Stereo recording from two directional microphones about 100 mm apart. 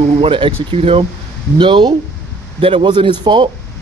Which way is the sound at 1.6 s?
55° right (ahead or behind).